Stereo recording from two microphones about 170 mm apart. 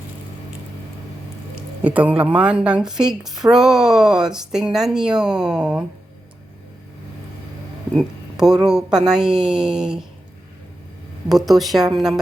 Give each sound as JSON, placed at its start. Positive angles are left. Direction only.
{"t": 1.8, "sound": "a woman's voice", "side_deg": -10}
{"t": 7.9, "sound": "a woman's voice", "side_deg": -5}
{"t": 11.3, "sound": "a woman's voice", "side_deg": 0}